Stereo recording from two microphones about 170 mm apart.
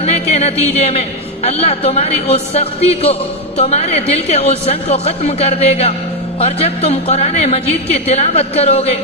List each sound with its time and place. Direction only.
0.0 s music: 40° left (ahead or behind)
1.5 s speech: 35° left (ahead or behind)